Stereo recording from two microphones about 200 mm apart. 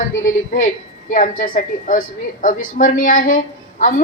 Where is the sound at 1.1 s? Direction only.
40° left (ahead or behind).